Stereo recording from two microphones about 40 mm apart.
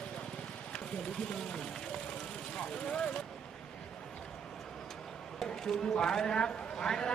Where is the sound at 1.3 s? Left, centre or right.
Centre.